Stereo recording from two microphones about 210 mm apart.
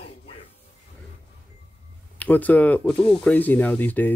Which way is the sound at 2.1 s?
5° left (ahead or behind).